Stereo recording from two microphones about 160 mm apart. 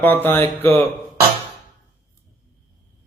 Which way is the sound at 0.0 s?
10° left (ahead or behind).